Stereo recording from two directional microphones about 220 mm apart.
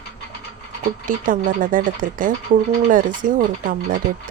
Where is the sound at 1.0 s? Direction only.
40° right (ahead or behind).